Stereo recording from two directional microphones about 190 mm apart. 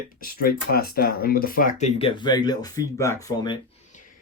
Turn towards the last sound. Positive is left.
turn(degrees=25)  # may be behind; listen again after turning